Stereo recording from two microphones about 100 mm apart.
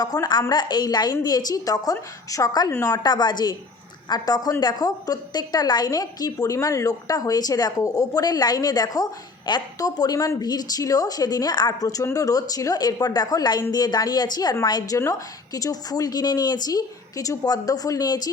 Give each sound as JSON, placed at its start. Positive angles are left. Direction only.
{"t": 0.0, "sound": "a woman's voice", "side_deg": 40}